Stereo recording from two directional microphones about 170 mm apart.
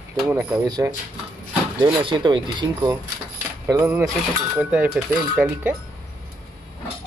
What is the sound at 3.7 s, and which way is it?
Speech, 15° right (ahead or behind).